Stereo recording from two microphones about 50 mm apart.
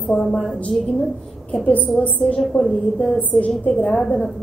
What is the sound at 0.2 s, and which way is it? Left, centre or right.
Speech, centre.